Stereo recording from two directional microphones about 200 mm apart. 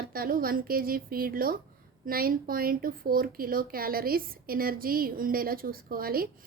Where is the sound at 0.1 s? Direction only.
45° right (ahead or behind).